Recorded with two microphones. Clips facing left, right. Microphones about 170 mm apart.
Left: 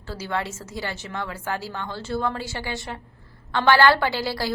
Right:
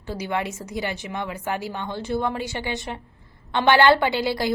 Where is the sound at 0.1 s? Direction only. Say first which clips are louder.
Right 2 dB; 15° right (ahead or behind).